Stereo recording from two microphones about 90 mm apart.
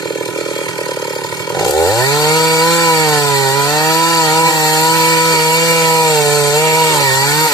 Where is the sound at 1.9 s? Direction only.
45° left (ahead or behind).